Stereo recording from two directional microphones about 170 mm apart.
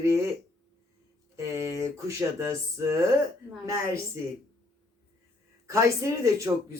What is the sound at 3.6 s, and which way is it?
Speech, 20° right (ahead or behind).